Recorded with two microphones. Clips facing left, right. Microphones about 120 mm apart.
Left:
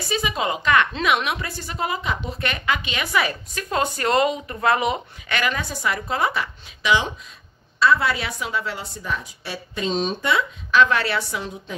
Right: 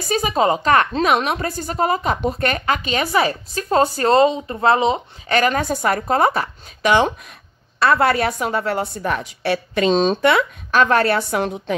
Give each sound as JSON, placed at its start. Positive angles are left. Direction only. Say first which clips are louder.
{"t": 0.0, "sound": "a woman's voice", "louder": "right 6 dB", "side_deg": -45}
{"t": 5.4, "sound": "a woman's voice", "louder": "right 6 dB", "side_deg": -45}